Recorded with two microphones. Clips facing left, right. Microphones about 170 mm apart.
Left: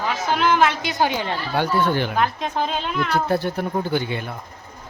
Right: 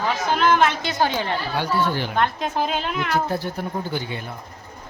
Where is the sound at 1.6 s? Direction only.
55° left (ahead or behind).